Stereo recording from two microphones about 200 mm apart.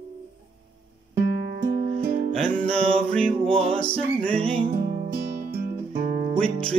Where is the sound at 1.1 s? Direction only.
55° right (ahead or behind).